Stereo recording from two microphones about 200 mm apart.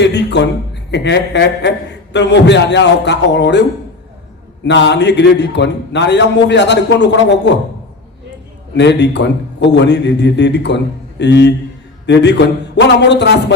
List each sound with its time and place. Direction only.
0.0 s a man's voice: 60° left (ahead or behind)
8.7 s a man's voice: 60° left (ahead or behind)